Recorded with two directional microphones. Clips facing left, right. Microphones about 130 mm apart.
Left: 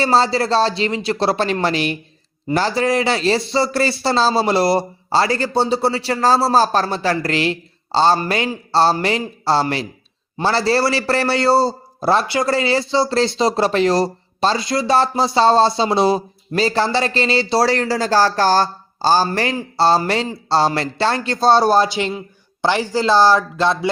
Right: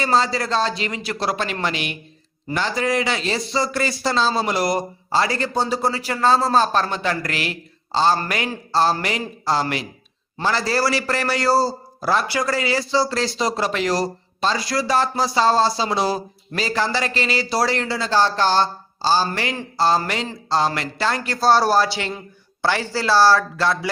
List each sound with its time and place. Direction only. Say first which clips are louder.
0.0 s a man's voice: left 4 dB; 30° left (ahead or behind)
19.7 s a man's voice: left 4 dB; 30° left (ahead or behind)